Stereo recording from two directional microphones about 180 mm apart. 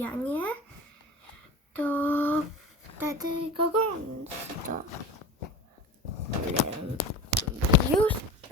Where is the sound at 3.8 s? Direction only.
45° right (ahead or behind).